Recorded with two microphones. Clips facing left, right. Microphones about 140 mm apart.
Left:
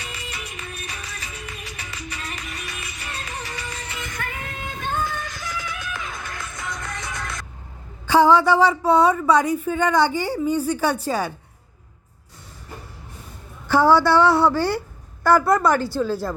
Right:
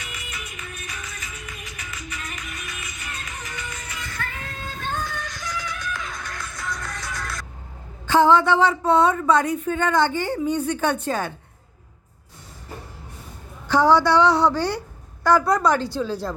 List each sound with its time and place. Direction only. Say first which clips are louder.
0.0 s music: left 2 dB; 35° left (ahead or behind); by 6.7 s centre (ahead or behind)
7.0 s vehicle: left 1 dB; 20° left (ahead or behind)
8.0 s speech: left 1 dB; 10° left (ahead or behind)
13.7 s a woman's voice: left 1 dB; 5° left (ahead or behind)